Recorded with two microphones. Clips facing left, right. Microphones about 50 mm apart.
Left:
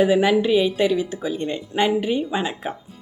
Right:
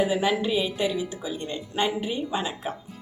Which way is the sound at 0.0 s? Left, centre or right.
Left.